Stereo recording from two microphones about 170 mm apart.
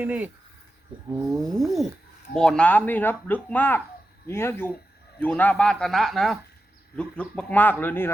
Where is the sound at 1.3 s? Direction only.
Centre (ahead or behind).